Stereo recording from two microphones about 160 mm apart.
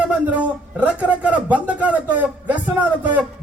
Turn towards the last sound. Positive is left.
turn(degrees=-10)  # may be behind; listen again after turning